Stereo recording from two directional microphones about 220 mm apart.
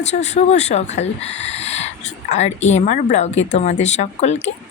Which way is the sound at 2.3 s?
30° left (ahead or behind).